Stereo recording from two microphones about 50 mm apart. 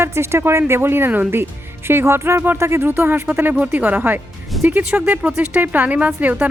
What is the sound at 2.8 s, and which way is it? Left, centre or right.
Speech, right.